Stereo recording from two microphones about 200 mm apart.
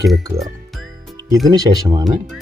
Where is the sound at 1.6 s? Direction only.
20° right (ahead or behind).